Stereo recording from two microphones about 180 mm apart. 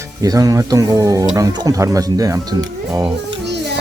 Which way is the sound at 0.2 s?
20° right (ahead or behind).